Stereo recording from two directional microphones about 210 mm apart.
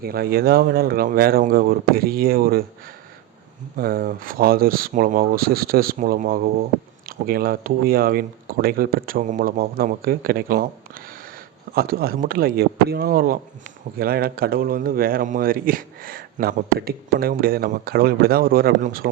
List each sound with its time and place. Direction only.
0.0 s speech: 45° right (ahead or behind)
3.8 s speech: 45° right (ahead or behind)